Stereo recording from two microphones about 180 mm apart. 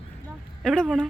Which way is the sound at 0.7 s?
Centre (ahead or behind).